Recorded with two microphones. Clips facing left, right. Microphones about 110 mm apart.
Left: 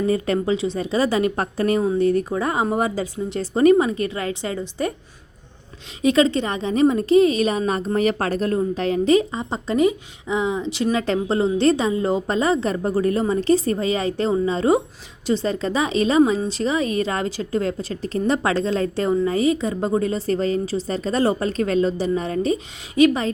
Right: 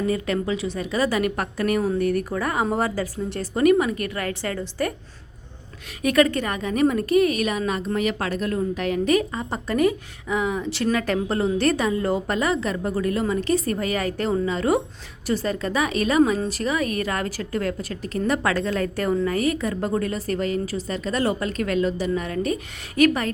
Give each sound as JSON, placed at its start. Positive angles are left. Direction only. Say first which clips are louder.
{"t": 0.1, "sound": "a woman's voice", "louder": "left 4 dB", "side_deg": 30}
{"t": 6.0, "sound": "a woman's voice", "louder": "left 2 dB", "side_deg": 25}